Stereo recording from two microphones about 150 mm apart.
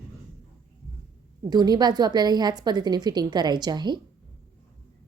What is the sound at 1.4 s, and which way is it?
A woman's voice, 25° right (ahead or behind).